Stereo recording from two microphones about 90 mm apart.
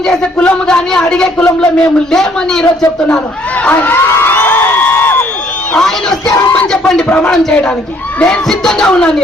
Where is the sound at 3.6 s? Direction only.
20° left (ahead or behind).